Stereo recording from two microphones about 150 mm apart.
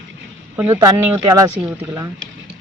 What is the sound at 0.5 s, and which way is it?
Speech, 15° right (ahead or behind).